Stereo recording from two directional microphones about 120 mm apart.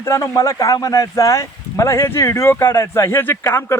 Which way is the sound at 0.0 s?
25° left (ahead or behind).